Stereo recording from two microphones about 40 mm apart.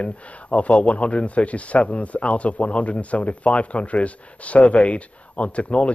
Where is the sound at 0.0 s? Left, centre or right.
Left.